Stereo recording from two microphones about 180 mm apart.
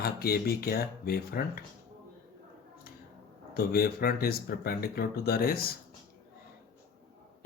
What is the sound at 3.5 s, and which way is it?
Speech, 60° left (ahead or behind).